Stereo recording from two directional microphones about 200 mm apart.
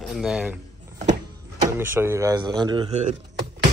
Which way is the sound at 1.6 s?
10° right (ahead or behind).